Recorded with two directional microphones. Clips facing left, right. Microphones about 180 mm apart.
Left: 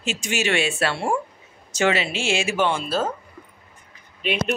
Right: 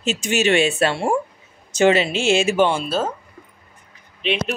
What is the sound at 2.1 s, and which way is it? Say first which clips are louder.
Speech: right 6 dB; 20° right (ahead or behind).